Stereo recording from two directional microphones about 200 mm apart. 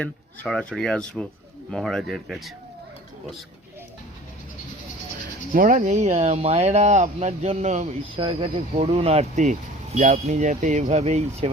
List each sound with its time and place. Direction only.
0.0 s speech: 5° left (ahead or behind)
5.5 s speech: 40° right (ahead or behind)